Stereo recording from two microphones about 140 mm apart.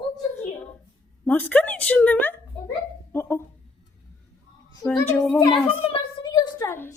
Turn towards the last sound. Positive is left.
turn(degrees=15)  # may be behind; listen again after turning